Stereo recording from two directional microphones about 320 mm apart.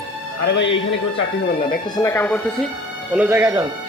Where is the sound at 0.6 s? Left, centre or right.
Left.